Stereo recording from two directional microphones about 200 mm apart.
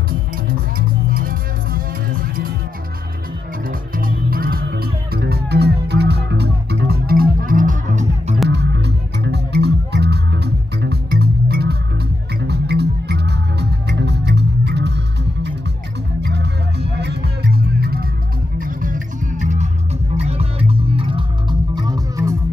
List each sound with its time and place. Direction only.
0.1 s music: 45° right (ahead or behind)
3.6 s music: 45° right (ahead or behind)
8.5 s music: 60° right (ahead or behind)
16.2 s music: 55° right (ahead or behind); by 22.4 s 15° right (ahead or behind)